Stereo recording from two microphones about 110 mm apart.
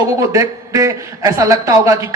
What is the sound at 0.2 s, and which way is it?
Speech, 30° right (ahead or behind).